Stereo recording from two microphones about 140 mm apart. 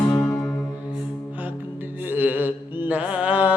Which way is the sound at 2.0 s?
15° right (ahead or behind).